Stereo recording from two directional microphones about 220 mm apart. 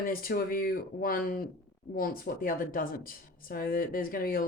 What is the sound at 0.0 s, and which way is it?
Speech, 40° left (ahead or behind).